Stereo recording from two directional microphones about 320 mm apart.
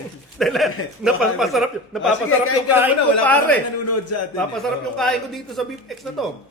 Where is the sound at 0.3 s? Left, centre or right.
Centre.